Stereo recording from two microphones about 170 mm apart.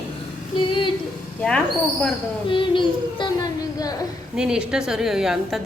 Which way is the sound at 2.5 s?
30° left (ahead or behind).